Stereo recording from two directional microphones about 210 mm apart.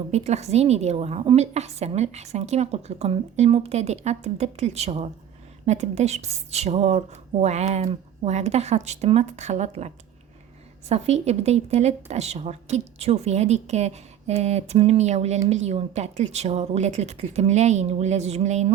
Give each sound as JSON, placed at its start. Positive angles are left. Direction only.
{"t": 0.1, "sound": "a woman's voice", "side_deg": -30}